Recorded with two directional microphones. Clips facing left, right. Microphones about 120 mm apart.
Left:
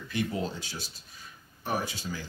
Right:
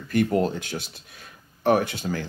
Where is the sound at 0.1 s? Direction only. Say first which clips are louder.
Right 10 dB; 55° right (ahead or behind).